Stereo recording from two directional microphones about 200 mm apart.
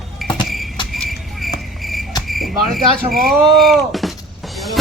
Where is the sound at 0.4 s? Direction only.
Centre (ahead or behind).